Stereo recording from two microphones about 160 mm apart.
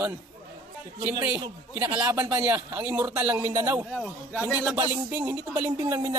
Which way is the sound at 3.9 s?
Centre (ahead or behind).